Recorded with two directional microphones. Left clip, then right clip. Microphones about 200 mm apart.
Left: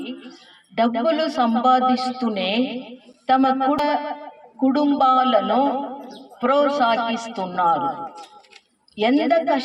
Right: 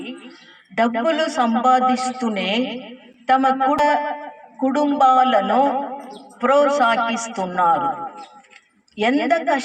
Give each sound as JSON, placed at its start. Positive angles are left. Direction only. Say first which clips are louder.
{"t": 0.8, "sound": "a man's voice", "louder": "right 1 dB", "side_deg": -15}